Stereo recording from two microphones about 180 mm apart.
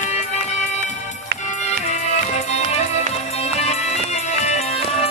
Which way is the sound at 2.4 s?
35° left (ahead or behind).